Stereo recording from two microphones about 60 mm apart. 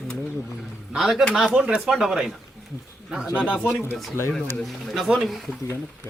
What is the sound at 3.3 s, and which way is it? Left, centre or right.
Speech, right.